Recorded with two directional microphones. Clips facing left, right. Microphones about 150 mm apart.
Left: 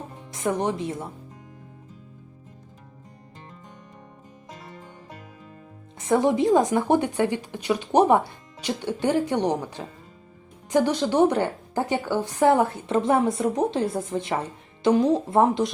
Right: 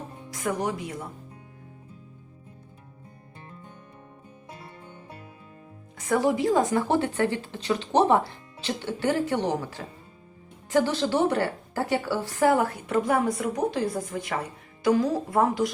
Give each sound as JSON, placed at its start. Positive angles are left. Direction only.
{"t": 0.3, "sound": "speech", "side_deg": 25}
{"t": 6.0, "sound": "a woman's voice", "side_deg": 20}